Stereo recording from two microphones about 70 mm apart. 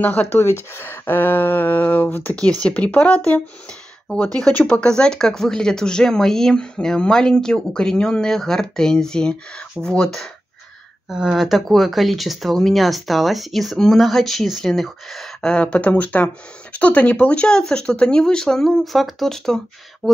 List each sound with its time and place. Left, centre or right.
0.0 s speech: left
0.4 s speech: left; by 10.3 s centre
11.1 s speech: centre
15.5 s speech: centre